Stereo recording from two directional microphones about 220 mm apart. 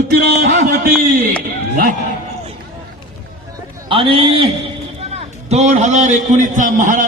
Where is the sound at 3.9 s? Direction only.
25° right (ahead or behind).